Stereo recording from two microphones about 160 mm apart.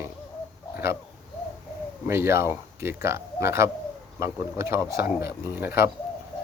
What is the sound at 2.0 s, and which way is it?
Speech, 15° right (ahead or behind).